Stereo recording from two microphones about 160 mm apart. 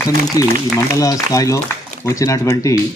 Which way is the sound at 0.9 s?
20° left (ahead or behind).